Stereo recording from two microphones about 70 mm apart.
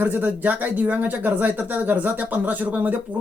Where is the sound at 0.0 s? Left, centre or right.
Right.